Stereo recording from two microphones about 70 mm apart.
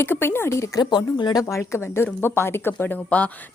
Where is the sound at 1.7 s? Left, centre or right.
Left.